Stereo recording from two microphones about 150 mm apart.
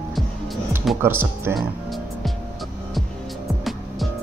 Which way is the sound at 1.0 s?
15° right (ahead or behind).